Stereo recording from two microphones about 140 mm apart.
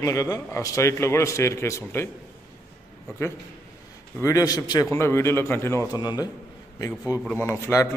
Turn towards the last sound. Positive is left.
turn(degrees=20)  # may be behind; listen again after turning